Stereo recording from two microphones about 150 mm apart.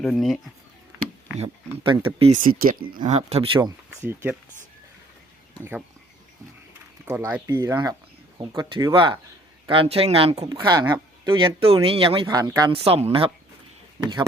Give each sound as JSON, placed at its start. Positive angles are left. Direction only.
{"t": 0.0, "sound": "speech", "side_deg": 0}
{"t": 1.4, "sound": "speech", "side_deg": -35}
{"t": 2.4, "sound": "speech", "side_deg": -70}
{"t": 3.1, "sound": "speech", "side_deg": -45}
{"t": 3.6, "sound": "speech", "side_deg": -15}
{"t": 7.0, "sound": "speech", "side_deg": -15}
{"t": 10.4, "sound": "speech", "side_deg": -30}
{"t": 12.7, "sound": "speech", "side_deg": -40}